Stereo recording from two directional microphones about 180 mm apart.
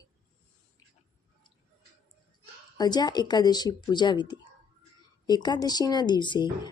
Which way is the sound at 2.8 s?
20° left (ahead or behind).